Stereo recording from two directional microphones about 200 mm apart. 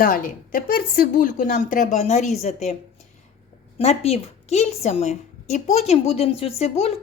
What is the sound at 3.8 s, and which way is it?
A woman's voice, 30° left (ahead or behind).